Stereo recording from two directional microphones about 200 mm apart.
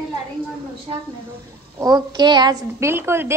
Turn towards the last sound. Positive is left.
turn(degrees=-10)  # may be behind; listen again after turning